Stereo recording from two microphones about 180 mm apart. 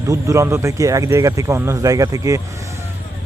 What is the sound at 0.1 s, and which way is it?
A man's voice, 15° right (ahead or behind).